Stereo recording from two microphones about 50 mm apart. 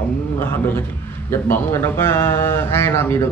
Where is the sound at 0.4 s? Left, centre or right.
Left.